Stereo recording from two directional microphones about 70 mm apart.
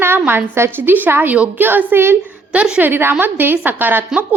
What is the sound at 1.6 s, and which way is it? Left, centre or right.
Speech, right.